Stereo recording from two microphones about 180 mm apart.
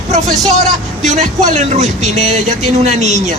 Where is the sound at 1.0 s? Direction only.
40° right (ahead or behind).